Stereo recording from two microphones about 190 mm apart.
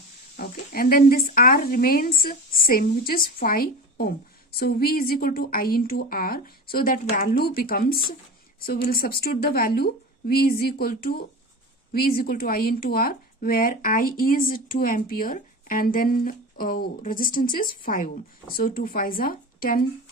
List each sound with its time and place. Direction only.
0.3 s speech: 50° left (ahead or behind)